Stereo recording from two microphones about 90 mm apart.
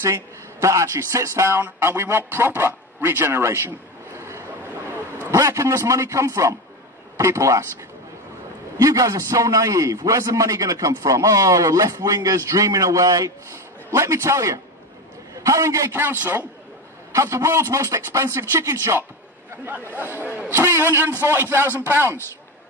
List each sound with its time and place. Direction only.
0.0 s a man's voice: 35° right (ahead or behind)
4.2 s vehicle: 30° right (ahead or behind)
5.3 s a man's voice: 35° right (ahead or behind)
8.7 s a man's voice: 40° right (ahead or behind)
15.9 s a man's voice: 25° right (ahead or behind)
19.9 s a man's voice: 25° right (ahead or behind)